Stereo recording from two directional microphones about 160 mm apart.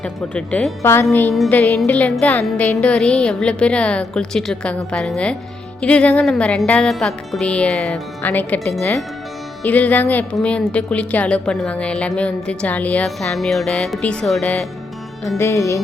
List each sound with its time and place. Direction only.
0.0 s a woman's voice: 5° left (ahead or behind)
1.3 s a woman's voice: 5° left (ahead or behind)
9.6 s a woman's voice: 10° left (ahead or behind)
15.4 s a woman's voice: 15° left (ahead or behind)